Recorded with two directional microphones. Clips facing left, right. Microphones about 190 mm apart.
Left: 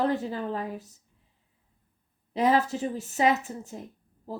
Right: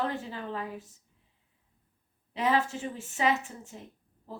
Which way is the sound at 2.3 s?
40° left (ahead or behind).